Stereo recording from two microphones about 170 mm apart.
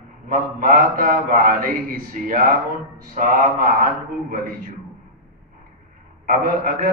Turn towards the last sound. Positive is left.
turn(degrees=-55)  # may be behind; listen again after turning